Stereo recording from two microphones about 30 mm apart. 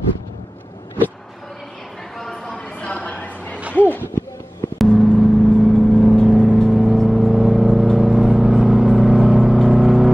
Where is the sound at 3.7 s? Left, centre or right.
Left.